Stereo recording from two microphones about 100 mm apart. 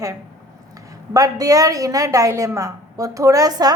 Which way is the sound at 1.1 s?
35° right (ahead or behind).